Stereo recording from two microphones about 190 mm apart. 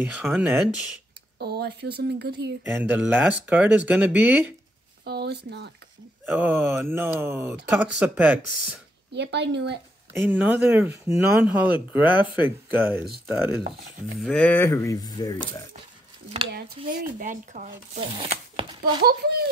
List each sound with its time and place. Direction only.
0.0 s speech: 5° right (ahead or behind)
1.4 s speech: 60° right (ahead or behind)
2.6 s speech: 10° right (ahead or behind)
5.0 s speech: 60° right (ahead or behind)
6.2 s speech: 10° right (ahead or behind)
9.1 s speech: 65° right (ahead or behind)
10.1 s speech: 10° right (ahead or behind)
14.2 s speech: 5° left (ahead or behind)
16.5 s speech: 50° right (ahead or behind)
19.0 s speech: 55° right (ahead or behind)